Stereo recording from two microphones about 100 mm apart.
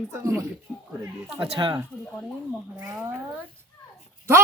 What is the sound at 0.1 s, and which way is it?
Speech, 30° right (ahead or behind).